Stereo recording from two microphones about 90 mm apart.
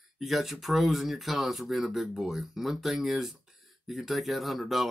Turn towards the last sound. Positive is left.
turn(degrees=0)  # may be behind; listen again after turning